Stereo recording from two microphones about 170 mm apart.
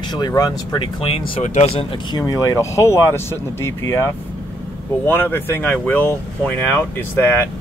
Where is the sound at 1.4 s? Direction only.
45° left (ahead or behind); by 7.4 s 15° left (ahead or behind).